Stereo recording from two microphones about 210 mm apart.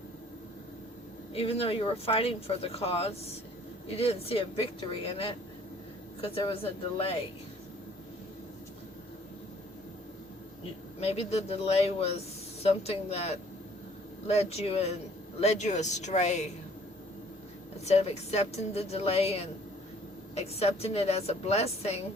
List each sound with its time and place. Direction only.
1.3 s speech: 25° left (ahead or behind)
6.5 s speech: 25° left (ahead or behind)
11.0 s speech: 30° left (ahead or behind)
17.8 s speech: 30° left (ahead or behind)